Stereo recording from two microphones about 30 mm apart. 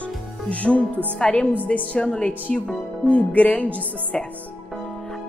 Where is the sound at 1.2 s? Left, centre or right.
Left.